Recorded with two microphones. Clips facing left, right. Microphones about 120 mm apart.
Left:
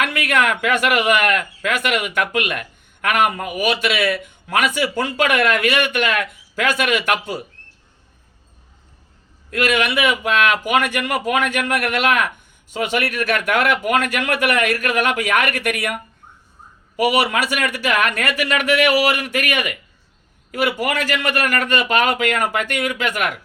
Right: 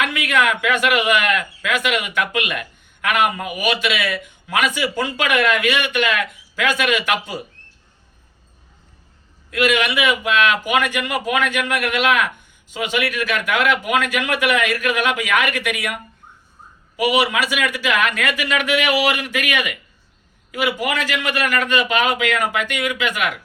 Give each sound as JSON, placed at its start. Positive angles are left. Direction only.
{"t": 0.0, "sound": "speech", "side_deg": 50}
{"t": 9.5, "sound": "speech", "side_deg": 45}
{"t": 17.0, "sound": "speech", "side_deg": 50}